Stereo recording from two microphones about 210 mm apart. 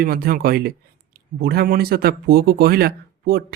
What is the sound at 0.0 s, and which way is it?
Speech, 45° right (ahead or behind).